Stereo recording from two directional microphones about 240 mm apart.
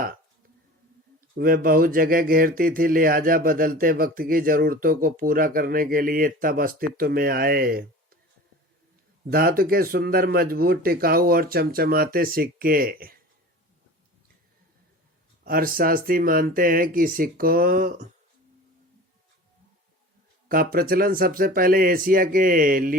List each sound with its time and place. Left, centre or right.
1.4 s speech: right
9.3 s speech: right
15.4 s speech: right
20.5 s speech: right